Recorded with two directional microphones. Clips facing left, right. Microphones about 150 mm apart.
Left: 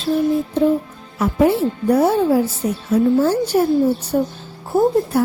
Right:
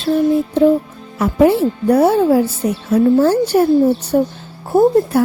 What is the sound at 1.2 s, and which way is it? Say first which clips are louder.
Speech: right 3 dB; 75° right (ahead or behind).